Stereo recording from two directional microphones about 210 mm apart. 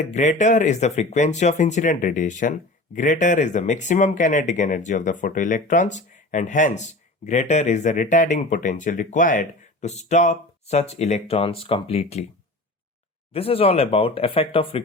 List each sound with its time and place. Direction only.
0.0 s speech: 35° left (ahead or behind)
13.3 s speech: 25° left (ahead or behind)